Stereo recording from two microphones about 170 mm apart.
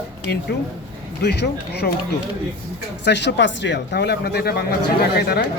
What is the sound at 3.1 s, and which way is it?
Speech, 90° left.